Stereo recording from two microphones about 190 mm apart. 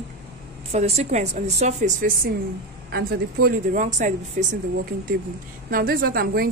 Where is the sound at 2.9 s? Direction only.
55° right (ahead or behind).